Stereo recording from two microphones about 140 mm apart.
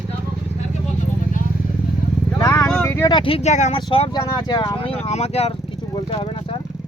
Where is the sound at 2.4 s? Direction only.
25° left (ahead or behind).